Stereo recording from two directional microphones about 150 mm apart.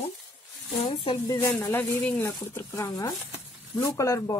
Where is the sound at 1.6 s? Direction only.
15° left (ahead or behind).